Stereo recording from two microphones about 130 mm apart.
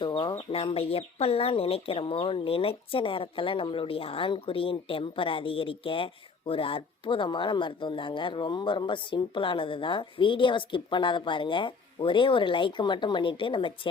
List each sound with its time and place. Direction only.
0.0 s speech: 35° left (ahead or behind)